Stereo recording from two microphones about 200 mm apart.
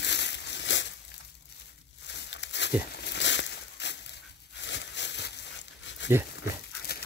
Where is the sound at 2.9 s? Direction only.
55° left (ahead or behind).